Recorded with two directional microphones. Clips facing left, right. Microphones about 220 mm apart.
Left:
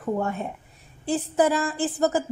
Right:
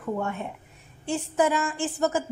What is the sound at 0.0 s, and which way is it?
A woman's voice, 35° left (ahead or behind).